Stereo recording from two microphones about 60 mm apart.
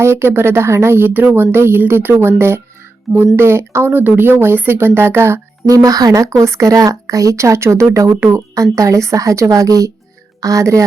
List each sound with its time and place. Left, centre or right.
0.0 s speech: right
3.9 s speech: right
5.6 s speech: right
9.5 s speech: right